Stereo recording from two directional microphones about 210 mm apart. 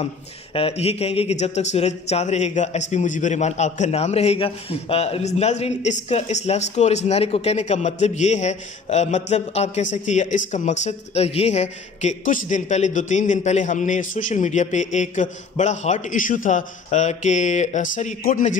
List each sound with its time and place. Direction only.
0.0 s a man's voice: 25° left (ahead or behind)